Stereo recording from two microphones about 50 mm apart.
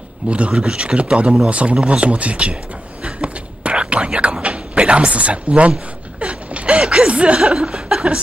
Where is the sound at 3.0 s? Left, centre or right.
Right.